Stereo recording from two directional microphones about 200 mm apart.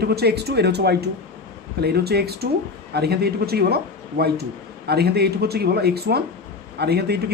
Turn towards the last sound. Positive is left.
turn(degrees=-55)  # may be behind; listen again after turning